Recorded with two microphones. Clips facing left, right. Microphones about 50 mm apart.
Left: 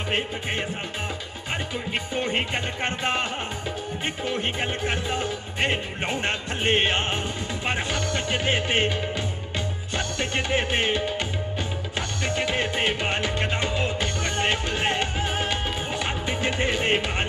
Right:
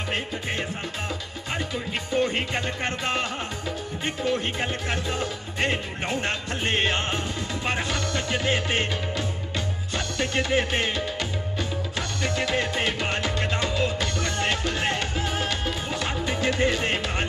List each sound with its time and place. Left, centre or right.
1.9 s music: left